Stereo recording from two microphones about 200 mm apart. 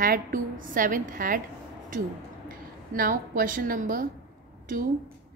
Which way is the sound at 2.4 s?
45° right (ahead or behind).